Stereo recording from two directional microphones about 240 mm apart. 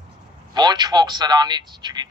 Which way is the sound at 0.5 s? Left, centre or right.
Centre.